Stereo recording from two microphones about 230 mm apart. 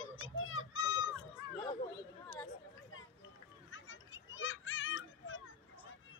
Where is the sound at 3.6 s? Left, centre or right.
Left.